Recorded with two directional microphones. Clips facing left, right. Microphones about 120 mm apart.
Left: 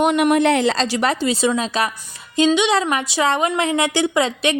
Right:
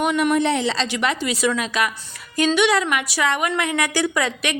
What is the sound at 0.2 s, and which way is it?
Speech, 65° left (ahead or behind).